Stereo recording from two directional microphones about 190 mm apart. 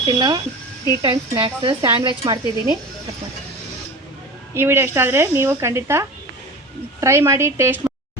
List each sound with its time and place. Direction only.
0.0 s speech: 20° right (ahead or behind)
4.5 s speech: 10° right (ahead or behind)